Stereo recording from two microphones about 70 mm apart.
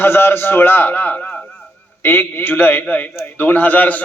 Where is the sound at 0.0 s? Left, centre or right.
Left.